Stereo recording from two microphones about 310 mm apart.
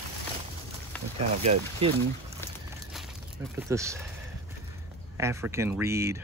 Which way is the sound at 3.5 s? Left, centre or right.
Centre.